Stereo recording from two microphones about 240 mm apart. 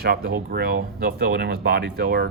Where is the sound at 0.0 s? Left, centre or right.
Right.